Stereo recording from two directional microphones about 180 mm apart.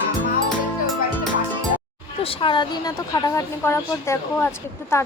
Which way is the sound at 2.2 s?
30° left (ahead or behind).